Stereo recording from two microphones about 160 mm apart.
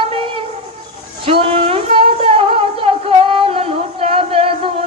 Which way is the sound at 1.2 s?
35° right (ahead or behind).